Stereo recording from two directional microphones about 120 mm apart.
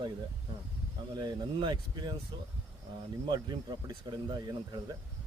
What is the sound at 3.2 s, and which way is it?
Speech, 40° right (ahead or behind).